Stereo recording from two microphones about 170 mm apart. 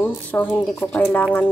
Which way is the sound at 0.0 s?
10° left (ahead or behind).